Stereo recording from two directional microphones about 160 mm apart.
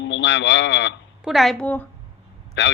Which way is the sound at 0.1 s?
90° left.